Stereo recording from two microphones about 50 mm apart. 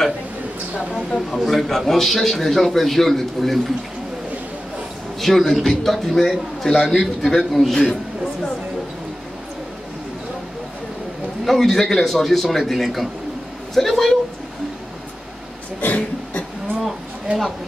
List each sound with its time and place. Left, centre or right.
1.3 s a man's voice: centre
5.2 s a man's voice: centre
7.7 s a man's voice: centre
11.4 s a man's voice: centre
15.8 s a sound: left